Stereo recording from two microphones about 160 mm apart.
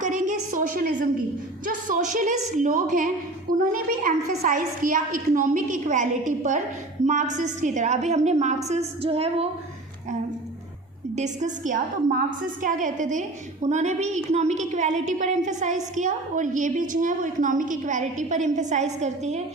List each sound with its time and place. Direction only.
0.0 s a sound: 55° right (ahead or behind)
1.6 s a woman's voice: 55° right (ahead or behind); by 9.5 s 40° right (ahead or behind)
11.1 s a woman's voice: 50° right (ahead or behind)